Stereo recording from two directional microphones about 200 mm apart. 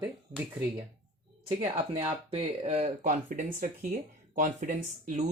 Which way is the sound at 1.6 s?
30° right (ahead or behind).